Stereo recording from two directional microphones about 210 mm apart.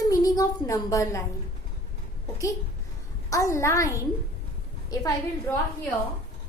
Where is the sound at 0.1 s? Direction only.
15° left (ahead or behind).